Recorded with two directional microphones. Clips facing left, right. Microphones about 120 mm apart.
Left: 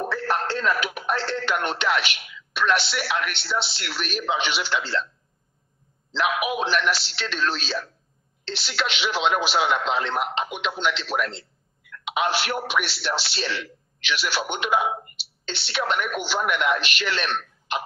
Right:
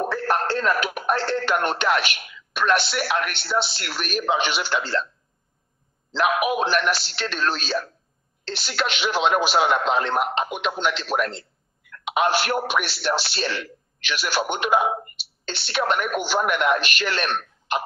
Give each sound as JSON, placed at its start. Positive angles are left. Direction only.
{"t": 0.0, "sound": "speech", "side_deg": -45}
{"t": 6.1, "sound": "a man's voice", "side_deg": -45}